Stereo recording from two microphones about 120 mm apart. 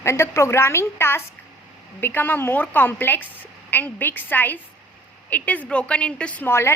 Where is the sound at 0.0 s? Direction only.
20° left (ahead or behind).